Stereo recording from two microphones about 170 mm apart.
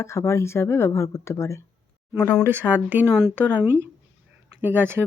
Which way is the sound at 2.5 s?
10° right (ahead or behind).